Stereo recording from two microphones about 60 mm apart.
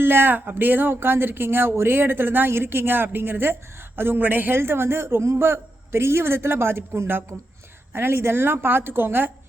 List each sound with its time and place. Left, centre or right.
0.0 s speech: right